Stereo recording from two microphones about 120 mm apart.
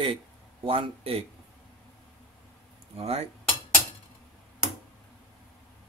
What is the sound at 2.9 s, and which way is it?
Cutlery, 55° right (ahead or behind).